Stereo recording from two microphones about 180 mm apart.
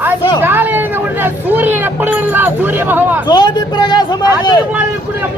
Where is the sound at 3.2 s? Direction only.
25° left (ahead or behind).